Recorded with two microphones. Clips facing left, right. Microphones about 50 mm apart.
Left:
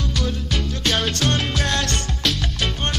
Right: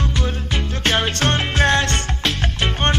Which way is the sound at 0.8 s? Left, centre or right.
Right.